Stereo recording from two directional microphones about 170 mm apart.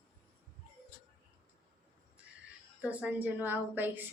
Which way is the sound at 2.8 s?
10° right (ahead or behind).